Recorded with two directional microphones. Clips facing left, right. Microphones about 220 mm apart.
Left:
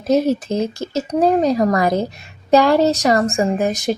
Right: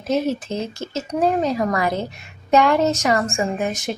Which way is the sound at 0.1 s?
40° left (ahead or behind).